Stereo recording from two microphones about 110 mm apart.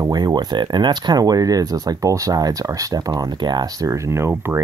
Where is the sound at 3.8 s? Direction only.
25° right (ahead or behind).